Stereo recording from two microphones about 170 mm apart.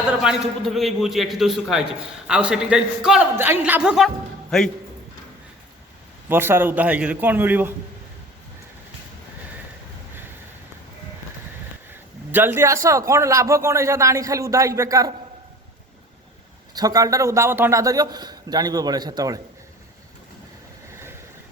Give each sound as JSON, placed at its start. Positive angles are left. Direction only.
{"t": 0.2, "sound": "a man's voice", "side_deg": -5}
{"t": 6.2, "sound": "a man's voice", "side_deg": -15}
{"t": 12.3, "sound": "a man's voice", "side_deg": -10}
{"t": 16.7, "sound": "a man's voice", "side_deg": -20}